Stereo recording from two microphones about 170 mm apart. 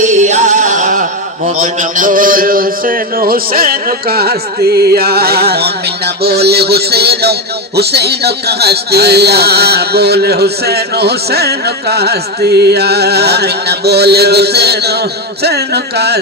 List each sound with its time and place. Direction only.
0.0 s music: 45° right (ahead or behind)
1.5 s a man's voice: 45° right (ahead or behind); by 16.1 s 75° right (ahead or behind)